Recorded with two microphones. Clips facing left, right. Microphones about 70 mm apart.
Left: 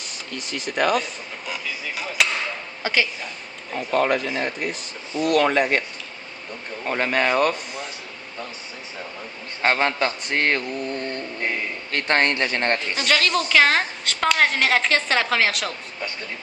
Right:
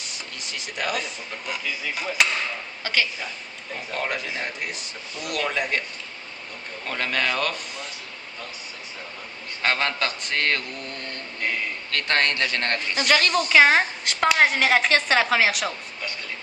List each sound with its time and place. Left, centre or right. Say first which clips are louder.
0.3 s speech: left 9 dB; left
2.2 s speech: even; centre
2.8 s a woman's voice: left 3 dB; centre
4.1 s speech: left 6 dB; left
6.8 s a man's voice: left 4 dB; left
9.6 s a man's voice: left 4 dB; left
13.1 s a woman's voice: even; centre